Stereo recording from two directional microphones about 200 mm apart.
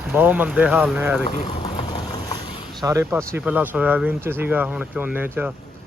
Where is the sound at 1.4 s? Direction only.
30° left (ahead or behind).